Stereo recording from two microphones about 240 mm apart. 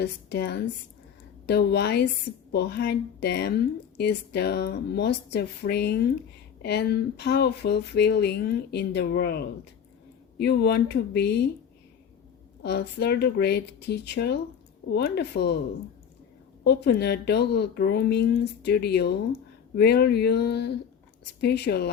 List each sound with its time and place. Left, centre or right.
0.0 s a woman's voice: left
12.6 s speech: left
16.6 s speech: left